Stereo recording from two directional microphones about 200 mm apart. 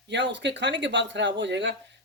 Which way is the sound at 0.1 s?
60° right (ahead or behind).